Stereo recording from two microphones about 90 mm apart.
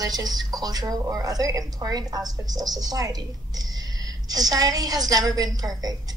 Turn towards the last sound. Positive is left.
turn(degrees=-45)  # may be behind; listen again after turning